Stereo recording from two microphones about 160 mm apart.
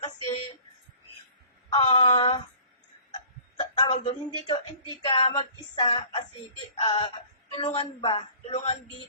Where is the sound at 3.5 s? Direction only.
35° left (ahead or behind).